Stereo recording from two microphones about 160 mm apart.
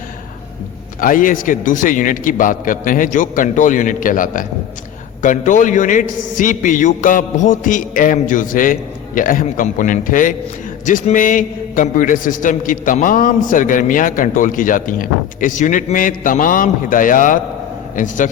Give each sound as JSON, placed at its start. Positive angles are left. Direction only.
{"t": 1.0, "sound": "a man's voice", "side_deg": 60}